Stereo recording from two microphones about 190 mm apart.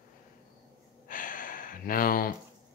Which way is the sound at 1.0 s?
45° left (ahead or behind).